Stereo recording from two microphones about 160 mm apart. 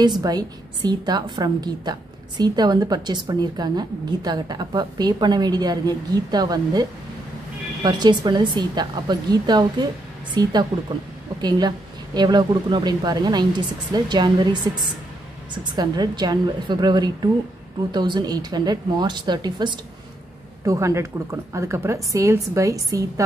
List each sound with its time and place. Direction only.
0.0 s a woman's voice: 25° right (ahead or behind)